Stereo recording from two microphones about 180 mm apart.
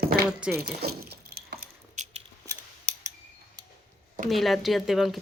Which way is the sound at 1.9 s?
40° right (ahead or behind).